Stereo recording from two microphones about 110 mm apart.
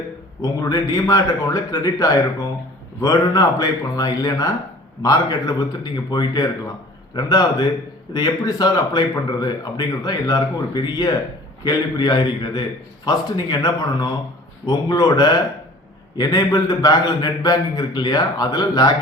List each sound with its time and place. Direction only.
0.4 s speech: 35° left (ahead or behind)